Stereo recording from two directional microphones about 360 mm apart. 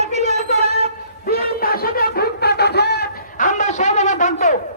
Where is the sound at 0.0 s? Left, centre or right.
Centre.